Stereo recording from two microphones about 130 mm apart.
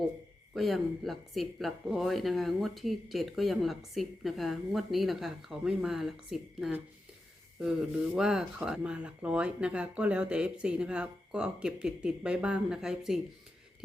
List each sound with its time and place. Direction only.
0.5 s speech: centre (ahead or behind)